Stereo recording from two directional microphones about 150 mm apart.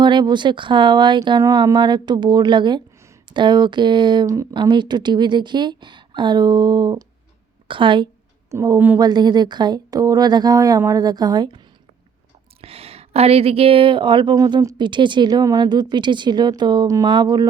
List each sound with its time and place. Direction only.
0.0 s speech: 30° right (ahead or behind)
8.4 s speech: 20° right (ahead or behind)
9.0 s speech: 25° right (ahead or behind)
12.6 s speech: 40° right (ahead or behind)